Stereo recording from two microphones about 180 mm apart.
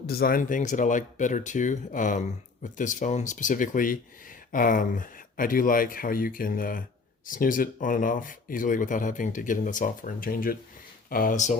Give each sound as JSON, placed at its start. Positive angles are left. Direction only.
{"t": 0.1, "sound": "speech", "side_deg": 55}